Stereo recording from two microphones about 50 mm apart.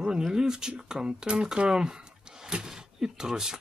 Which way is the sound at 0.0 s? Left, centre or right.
Centre.